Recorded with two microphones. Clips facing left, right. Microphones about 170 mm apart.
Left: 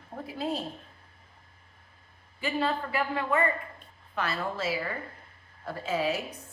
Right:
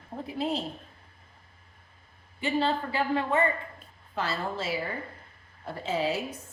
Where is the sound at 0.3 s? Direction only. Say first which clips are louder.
Right 2 dB; 25° right (ahead or behind).